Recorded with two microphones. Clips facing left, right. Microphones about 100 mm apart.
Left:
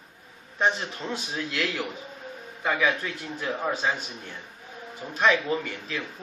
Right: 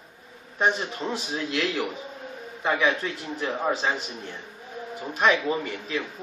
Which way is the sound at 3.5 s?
10° right (ahead or behind).